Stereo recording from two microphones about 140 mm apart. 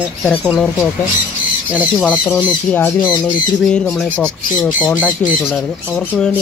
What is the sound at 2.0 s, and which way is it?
Speech, 10° left (ahead or behind).